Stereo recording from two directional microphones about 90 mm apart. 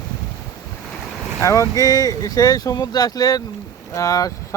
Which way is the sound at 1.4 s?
35° left (ahead or behind).